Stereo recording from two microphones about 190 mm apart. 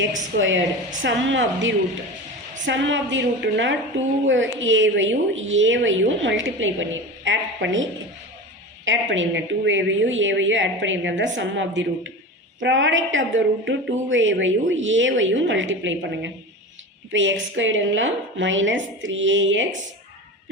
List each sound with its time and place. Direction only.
0.3 s a woman's voice: 85° right
4.3 s a woman's voice: 85° right